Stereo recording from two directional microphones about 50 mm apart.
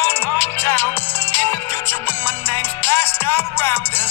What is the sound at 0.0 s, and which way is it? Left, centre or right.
Music, left.